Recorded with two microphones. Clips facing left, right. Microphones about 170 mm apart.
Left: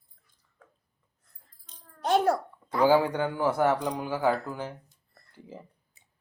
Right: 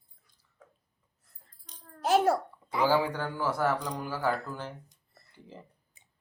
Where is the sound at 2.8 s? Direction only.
20° left (ahead or behind).